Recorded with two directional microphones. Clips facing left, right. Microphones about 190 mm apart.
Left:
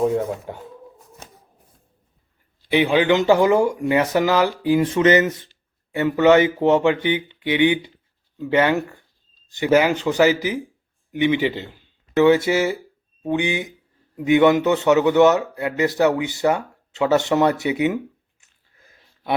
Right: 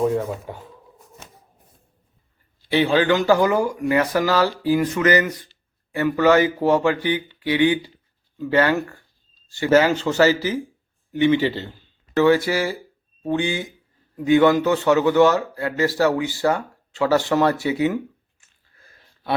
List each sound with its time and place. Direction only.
0.0 s speech: centre (ahead or behind)
2.6 s a man's voice: 15° left (ahead or behind)